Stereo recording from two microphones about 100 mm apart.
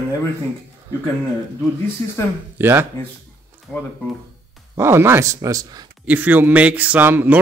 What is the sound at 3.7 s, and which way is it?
Speech, 5° right (ahead or behind).